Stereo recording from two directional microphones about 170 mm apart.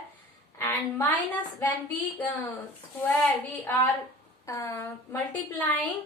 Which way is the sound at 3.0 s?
10° left (ahead or behind).